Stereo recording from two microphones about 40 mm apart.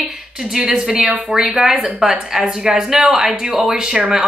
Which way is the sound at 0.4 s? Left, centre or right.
Centre.